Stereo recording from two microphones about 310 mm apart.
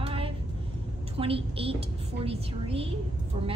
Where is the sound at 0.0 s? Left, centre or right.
Centre.